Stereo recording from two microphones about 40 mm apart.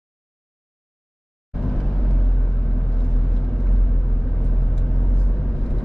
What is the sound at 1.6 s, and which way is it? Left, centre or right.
Vehicle, centre.